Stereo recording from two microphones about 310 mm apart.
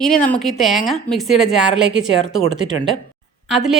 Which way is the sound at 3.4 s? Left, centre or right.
Centre.